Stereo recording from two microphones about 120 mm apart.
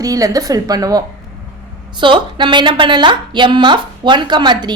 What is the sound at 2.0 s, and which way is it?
A woman's voice, 40° right (ahead or behind).